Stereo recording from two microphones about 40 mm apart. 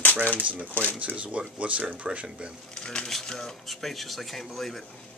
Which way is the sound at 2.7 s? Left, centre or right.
Left.